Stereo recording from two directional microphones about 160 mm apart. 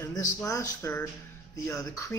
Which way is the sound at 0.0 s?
20° left (ahead or behind).